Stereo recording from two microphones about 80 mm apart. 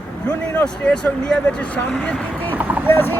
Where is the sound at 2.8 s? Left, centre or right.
Left.